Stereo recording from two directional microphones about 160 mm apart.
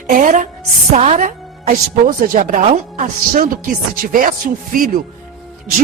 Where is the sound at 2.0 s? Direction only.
60° right (ahead or behind).